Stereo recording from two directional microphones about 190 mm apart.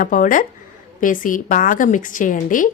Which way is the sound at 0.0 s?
45° left (ahead or behind).